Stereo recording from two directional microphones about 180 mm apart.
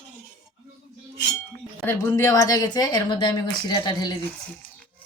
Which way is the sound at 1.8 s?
15° left (ahead or behind).